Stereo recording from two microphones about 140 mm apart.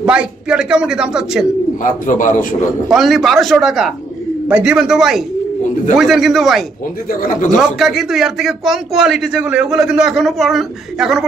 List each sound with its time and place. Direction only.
0.0 s a man's voice: 5° right (ahead or behind)
1.8 s speech: 70° left (ahead or behind)
2.9 s a man's voice: centre (ahead or behind)
7.1 s speech: 80° left
7.8 s a man's voice: centre (ahead or behind)